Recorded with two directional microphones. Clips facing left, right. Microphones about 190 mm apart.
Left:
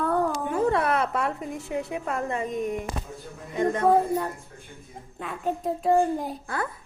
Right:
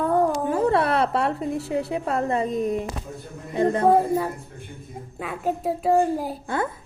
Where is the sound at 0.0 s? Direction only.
15° right (ahead or behind).